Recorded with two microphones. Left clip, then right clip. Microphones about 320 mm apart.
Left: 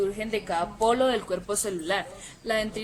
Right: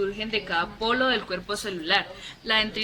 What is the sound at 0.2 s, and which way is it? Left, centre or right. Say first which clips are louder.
A woman's voice: right 1 dB; left.